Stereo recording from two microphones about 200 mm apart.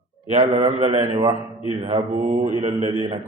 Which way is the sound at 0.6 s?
15° right (ahead or behind).